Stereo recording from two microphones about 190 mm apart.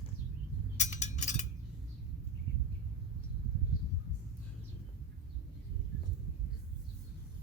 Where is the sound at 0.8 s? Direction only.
40° left (ahead or behind).